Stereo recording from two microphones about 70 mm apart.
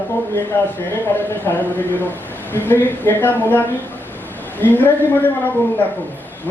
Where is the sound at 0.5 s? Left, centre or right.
Left.